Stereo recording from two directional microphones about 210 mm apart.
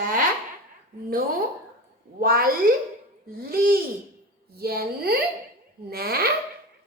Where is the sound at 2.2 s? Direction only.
45° right (ahead or behind).